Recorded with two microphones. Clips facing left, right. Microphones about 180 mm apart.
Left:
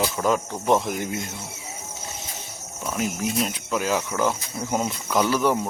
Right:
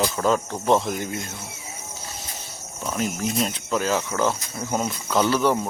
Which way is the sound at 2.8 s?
5° left (ahead or behind).